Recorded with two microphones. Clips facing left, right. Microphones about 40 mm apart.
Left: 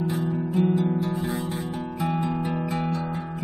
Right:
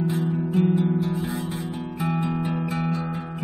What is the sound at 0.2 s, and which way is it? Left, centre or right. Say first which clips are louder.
Music: even; centre.